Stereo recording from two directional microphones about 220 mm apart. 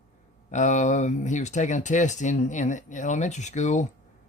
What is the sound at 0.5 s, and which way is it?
Speech, 35° left (ahead or behind).